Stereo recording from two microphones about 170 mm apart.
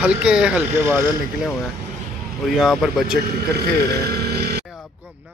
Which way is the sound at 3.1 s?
70° right (ahead or behind).